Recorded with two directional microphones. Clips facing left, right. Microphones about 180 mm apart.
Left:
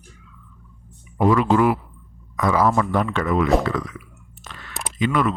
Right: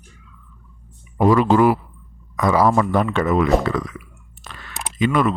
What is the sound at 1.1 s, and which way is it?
A man's voice, 35° right (ahead or behind).